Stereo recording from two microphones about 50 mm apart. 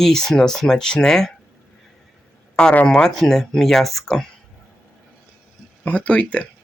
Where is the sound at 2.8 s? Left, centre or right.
Centre.